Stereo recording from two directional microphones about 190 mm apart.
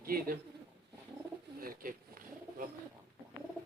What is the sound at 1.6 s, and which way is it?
Pigeon, 50° right (ahead or behind).